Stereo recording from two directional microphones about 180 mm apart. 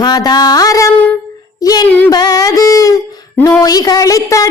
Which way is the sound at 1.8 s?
10° left (ahead or behind).